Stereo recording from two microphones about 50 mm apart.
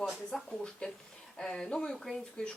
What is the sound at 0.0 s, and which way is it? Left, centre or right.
Speech, centre.